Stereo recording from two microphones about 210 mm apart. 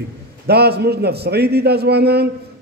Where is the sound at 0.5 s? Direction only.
50° right (ahead or behind).